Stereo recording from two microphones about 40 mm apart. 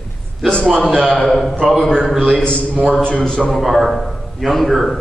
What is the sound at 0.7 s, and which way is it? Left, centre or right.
Speech, centre.